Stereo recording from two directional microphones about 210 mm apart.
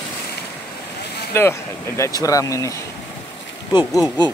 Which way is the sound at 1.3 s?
10° left (ahead or behind).